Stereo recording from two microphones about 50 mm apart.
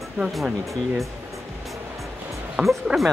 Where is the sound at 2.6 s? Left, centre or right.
Centre.